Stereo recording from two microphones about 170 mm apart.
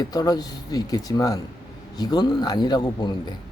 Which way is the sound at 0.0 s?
25° left (ahead or behind).